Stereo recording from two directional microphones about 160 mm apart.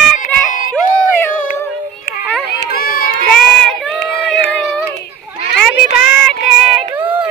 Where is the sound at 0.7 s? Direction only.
10° left (ahead or behind).